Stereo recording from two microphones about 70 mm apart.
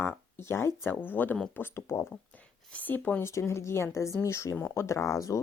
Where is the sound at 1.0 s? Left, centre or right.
Left.